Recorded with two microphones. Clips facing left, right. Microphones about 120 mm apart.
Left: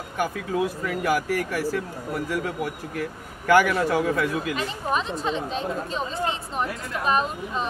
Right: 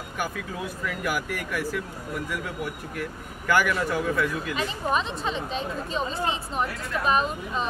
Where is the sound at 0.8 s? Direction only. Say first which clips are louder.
Left 5 dB; 30° left (ahead or behind).